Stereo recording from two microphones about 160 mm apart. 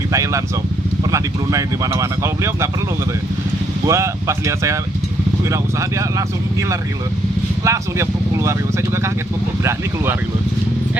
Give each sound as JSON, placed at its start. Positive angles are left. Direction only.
{"t": 0.1, "sound": "speech", "side_deg": -20}
{"t": 3.8, "sound": "speech", "side_deg": -20}
{"t": 6.0, "sound": "speech", "side_deg": -20}